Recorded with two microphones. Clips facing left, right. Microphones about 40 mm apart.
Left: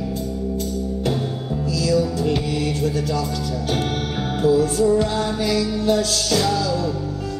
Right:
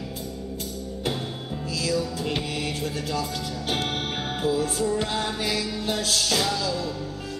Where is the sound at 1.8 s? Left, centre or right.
Centre.